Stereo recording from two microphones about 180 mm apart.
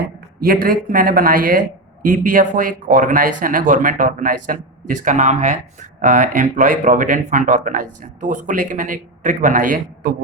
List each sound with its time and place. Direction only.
0.3 s speech: 55° right (ahead or behind)